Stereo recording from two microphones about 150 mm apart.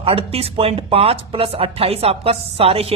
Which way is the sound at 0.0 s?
40° right (ahead or behind).